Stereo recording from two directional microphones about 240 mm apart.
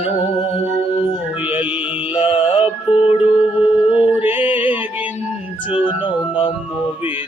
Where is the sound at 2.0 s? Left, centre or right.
Left.